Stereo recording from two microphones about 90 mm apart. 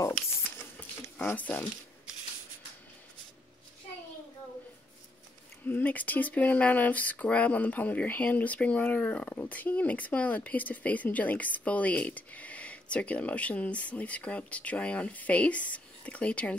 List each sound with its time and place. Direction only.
0.6 s a sound: 25° left (ahead or behind)
1.2 s speech: 20° left (ahead or behind)
5.7 s speech: 20° left (ahead or behind)